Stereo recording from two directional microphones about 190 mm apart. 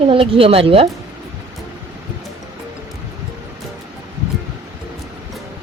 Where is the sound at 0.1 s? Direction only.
30° right (ahead or behind).